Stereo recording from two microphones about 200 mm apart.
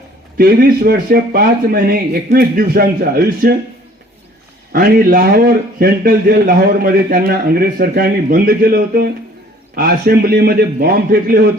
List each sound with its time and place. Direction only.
0.3 s a man's voice: 50° right (ahead or behind)
4.7 s a man's voice: 45° right (ahead or behind)